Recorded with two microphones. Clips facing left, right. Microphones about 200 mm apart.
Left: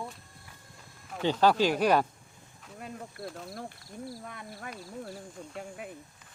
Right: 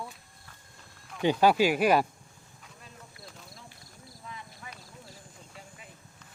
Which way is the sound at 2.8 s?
55° left (ahead or behind).